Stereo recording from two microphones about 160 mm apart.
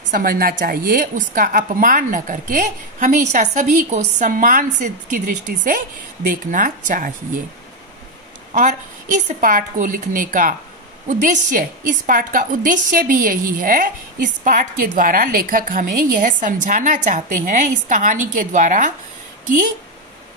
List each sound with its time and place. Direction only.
0.1 s a woman's voice: 65° right (ahead or behind)
9.4 s a woman's voice: 60° right (ahead or behind)